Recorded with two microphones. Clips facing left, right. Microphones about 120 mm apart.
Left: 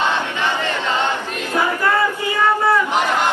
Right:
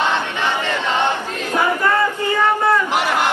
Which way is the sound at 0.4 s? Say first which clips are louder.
Even; 15° right (ahead or behind).